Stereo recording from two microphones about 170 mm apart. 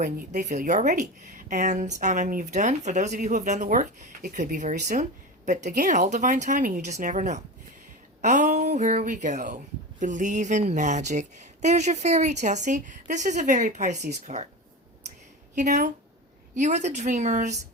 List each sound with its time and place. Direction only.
0.3 s speech: 50° right (ahead or behind)
15.5 s speech: 45° right (ahead or behind)